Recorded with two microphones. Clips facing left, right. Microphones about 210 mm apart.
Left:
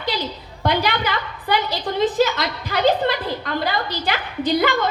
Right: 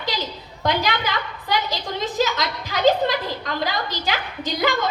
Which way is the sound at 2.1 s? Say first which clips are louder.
Left 3 dB; 55° left (ahead or behind).